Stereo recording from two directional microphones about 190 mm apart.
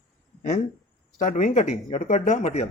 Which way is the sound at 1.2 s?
40° left (ahead or behind).